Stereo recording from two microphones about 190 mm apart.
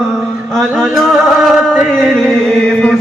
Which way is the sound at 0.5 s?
Centre (ahead or behind).